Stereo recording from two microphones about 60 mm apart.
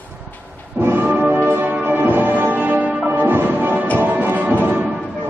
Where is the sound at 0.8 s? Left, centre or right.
Right.